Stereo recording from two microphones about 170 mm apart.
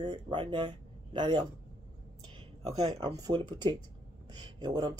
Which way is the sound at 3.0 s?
25° right (ahead or behind).